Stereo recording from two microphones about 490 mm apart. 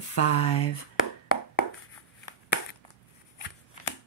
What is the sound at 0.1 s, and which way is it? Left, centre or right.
Speech, left.